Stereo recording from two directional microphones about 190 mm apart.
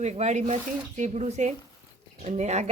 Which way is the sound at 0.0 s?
35° right (ahead or behind).